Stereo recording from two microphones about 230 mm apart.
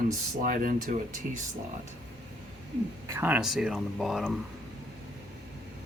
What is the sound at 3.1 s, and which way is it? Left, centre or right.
Speech, centre.